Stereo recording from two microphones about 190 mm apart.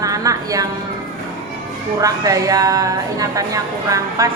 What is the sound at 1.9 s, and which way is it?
A woman's voice, 20° right (ahead or behind).